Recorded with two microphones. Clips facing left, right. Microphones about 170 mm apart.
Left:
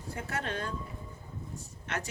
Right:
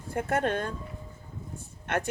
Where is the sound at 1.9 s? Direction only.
55° right (ahead or behind).